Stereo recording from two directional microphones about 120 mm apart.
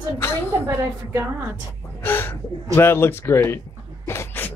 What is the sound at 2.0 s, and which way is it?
Gasp, 20° left (ahead or behind).